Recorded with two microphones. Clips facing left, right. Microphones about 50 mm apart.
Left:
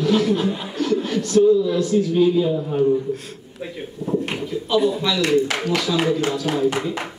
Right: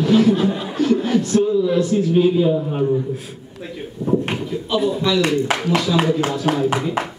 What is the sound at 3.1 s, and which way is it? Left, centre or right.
Speech, centre.